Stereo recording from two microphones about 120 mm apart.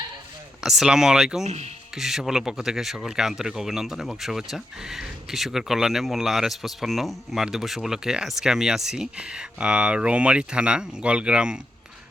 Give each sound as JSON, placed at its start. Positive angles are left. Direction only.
{"t": 0.6, "sound": "speech", "side_deg": -5}
{"t": 1.5, "sound": "speech", "side_deg": -65}
{"t": 2.0, "sound": "speech", "side_deg": -5}